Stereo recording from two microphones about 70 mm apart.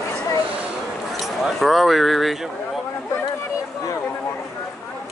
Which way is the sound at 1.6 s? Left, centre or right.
Centre.